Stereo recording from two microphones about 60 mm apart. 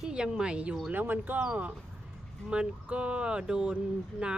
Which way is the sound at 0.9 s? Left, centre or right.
Right.